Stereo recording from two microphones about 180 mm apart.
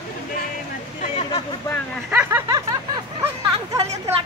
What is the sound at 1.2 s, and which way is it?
Speech, 30° left (ahead or behind).